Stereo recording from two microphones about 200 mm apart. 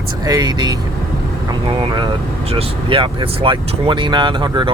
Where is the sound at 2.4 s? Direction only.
30° right (ahead or behind).